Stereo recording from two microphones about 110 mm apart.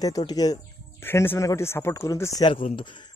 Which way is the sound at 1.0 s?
25° left (ahead or behind).